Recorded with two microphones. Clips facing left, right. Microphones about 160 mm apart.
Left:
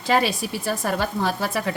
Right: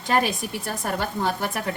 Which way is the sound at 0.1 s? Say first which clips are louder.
Left 2 dB; 90° left.